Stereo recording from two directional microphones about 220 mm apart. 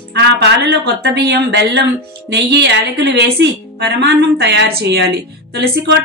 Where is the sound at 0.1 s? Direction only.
50° right (ahead or behind).